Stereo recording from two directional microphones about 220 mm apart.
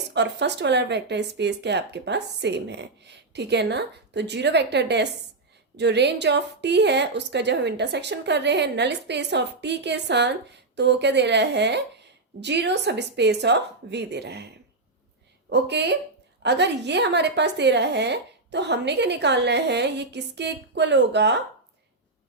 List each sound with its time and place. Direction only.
0.1 s a woman's voice: 50° right (ahead or behind)
15.4 s a woman's voice: 50° right (ahead or behind)